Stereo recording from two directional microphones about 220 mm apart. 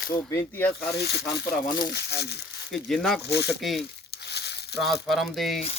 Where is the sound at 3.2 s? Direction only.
50° left (ahead or behind).